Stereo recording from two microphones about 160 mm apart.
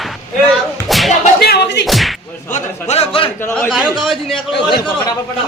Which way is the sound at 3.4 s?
5° left (ahead or behind).